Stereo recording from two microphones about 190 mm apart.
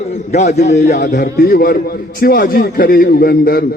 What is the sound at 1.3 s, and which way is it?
A man's voice, 55° left (ahead or behind).